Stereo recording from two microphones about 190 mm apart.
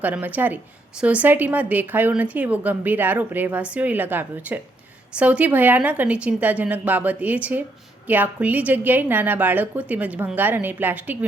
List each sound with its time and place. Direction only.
0.0 s a woman's voice: 10° right (ahead or behind)